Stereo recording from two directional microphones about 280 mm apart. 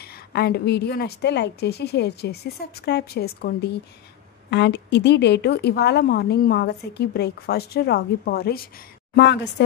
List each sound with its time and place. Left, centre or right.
0.0 s a woman's voice: left